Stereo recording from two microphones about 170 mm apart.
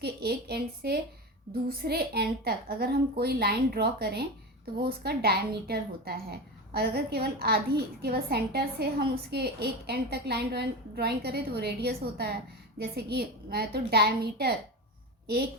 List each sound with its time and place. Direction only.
0.0 s a woman's voice: 70° right (ahead or behind)